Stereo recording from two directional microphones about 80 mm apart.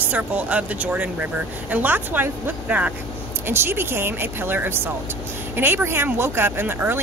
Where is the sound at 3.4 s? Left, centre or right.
Right.